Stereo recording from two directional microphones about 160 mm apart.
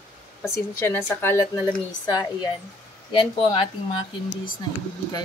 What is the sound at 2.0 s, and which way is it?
Speech, 25° left (ahead or behind).